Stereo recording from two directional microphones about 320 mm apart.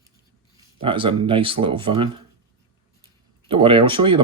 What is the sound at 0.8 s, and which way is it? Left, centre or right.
Speech, centre.